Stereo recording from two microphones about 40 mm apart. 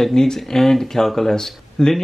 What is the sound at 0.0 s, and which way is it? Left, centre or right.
Speech, centre.